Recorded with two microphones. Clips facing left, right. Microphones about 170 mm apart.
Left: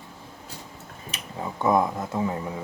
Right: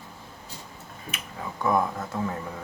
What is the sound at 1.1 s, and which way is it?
Speech, 25° left (ahead or behind).